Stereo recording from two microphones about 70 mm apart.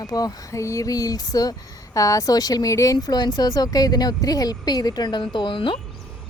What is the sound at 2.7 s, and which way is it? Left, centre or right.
Speech, left.